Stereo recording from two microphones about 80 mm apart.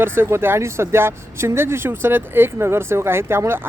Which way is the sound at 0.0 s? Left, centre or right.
Right.